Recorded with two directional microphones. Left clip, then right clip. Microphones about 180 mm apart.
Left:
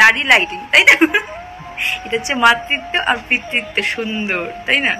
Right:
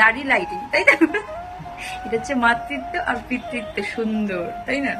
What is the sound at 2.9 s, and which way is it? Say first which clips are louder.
Speech: left 6 dB; 25° right (ahead or behind).